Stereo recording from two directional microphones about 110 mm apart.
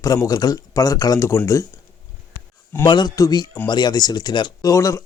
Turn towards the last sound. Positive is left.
turn(degrees=30)  # may be behind; listen again after turning